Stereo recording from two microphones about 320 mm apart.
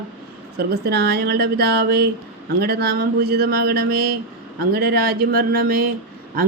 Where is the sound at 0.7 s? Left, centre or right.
Right.